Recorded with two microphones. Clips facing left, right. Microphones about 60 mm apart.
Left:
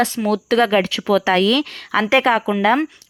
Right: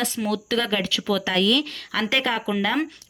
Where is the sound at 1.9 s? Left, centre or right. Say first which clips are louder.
Left 8 dB; left.